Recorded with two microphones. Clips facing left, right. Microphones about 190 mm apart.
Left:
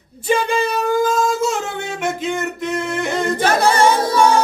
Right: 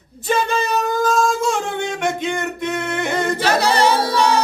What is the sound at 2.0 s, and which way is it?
Singing, 5° left (ahead or behind).